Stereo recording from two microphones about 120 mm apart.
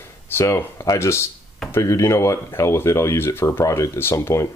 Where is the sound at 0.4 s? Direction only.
25° left (ahead or behind).